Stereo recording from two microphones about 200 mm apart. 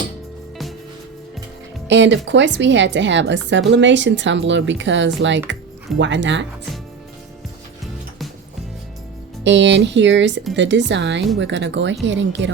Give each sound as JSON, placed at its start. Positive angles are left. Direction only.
{"t": 1.9, "sound": "a woman's voice", "side_deg": -65}
{"t": 9.4, "sound": "a woman's voice", "side_deg": -65}